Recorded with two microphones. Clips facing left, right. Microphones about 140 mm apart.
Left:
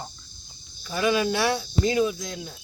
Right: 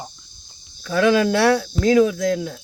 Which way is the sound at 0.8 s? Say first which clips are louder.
Right 7 dB; 90° right.